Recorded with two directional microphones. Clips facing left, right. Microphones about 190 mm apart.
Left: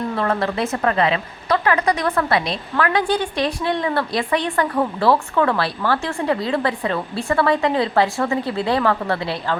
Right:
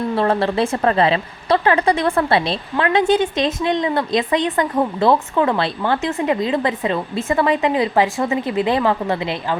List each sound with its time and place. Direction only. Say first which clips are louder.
0.2 s a woman's voice: right 4 dB; 30° right (ahead or behind)